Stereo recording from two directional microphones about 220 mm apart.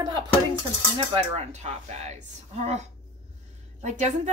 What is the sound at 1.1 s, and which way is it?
A woman's voice, 30° right (ahead or behind).